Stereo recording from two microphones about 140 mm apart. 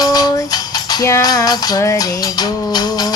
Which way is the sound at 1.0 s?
25° left (ahead or behind).